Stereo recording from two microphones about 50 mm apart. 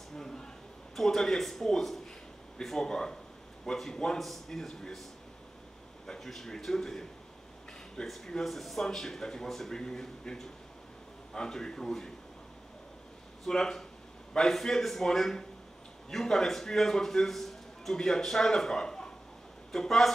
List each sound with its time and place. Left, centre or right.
0.1 s a sound: centre
0.9 s a man's voice: centre
6.0 s a man's voice: centre
13.5 s a man's voice: centre